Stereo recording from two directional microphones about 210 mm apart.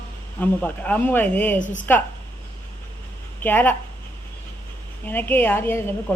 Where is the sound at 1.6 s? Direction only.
35° left (ahead or behind).